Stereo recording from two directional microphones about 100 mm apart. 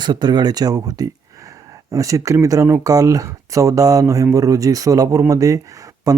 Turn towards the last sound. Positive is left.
turn(degrees=-35)  # may be behind; listen again after turning